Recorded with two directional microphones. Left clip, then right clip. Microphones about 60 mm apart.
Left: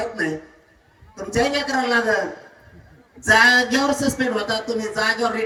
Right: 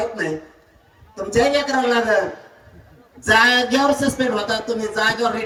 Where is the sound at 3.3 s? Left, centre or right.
Left.